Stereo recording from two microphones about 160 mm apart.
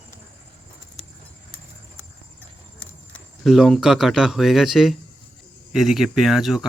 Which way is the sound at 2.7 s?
5° left (ahead or behind).